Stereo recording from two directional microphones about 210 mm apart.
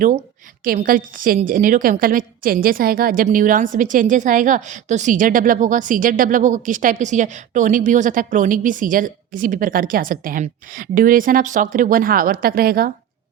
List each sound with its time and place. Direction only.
0.6 s a woman's voice: 40° right (ahead or behind)